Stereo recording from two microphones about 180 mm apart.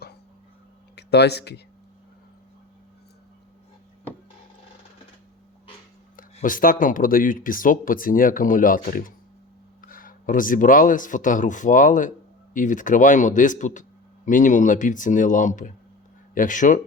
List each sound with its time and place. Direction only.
0.9 s speech: 65° left (ahead or behind)
6.3 s speech: 50° left (ahead or behind)